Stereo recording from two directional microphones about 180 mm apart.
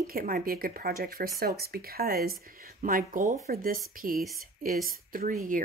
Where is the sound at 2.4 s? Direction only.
55° right (ahead or behind).